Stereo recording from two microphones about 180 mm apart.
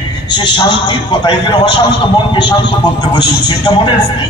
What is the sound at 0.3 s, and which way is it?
A man's voice, 25° left (ahead or behind).